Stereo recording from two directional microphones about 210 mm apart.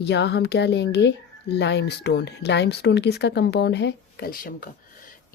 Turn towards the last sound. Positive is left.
turn(degrees=45)  # may be behind; listen again after turning